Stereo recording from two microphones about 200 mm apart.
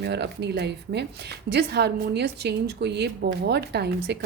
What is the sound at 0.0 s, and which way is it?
A woman's voice, 55° right (ahead or behind).